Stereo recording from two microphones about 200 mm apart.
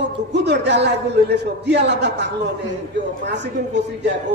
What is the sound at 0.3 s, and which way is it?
A woman's voice, 60° right (ahead or behind).